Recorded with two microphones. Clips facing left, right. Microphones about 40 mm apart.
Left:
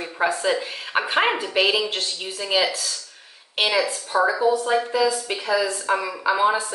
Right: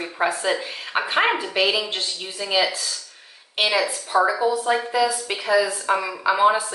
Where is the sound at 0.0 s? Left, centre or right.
Centre.